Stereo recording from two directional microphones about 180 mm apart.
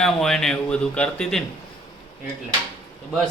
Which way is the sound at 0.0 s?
Centre (ahead or behind).